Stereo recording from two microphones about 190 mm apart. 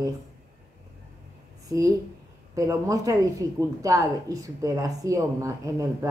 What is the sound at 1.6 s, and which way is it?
A woman's voice, 20° right (ahead or behind).